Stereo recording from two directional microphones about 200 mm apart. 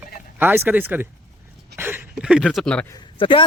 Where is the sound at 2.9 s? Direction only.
25° left (ahead or behind).